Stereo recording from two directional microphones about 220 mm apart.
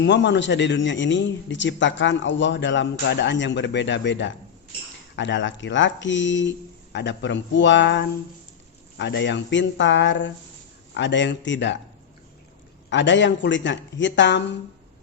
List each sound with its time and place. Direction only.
0.0 s speech: 55° left (ahead or behind)
12.9 s speech: 55° left (ahead or behind)